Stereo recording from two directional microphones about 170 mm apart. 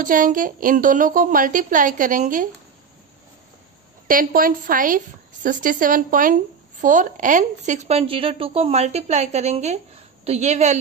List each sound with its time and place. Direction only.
0.0 s a woman's voice: 55° right (ahead or behind)
4.1 s a woman's voice: 55° right (ahead or behind)